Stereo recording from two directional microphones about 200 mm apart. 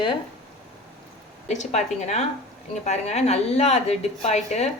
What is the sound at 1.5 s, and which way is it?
A woman's voice, 35° left (ahead or behind).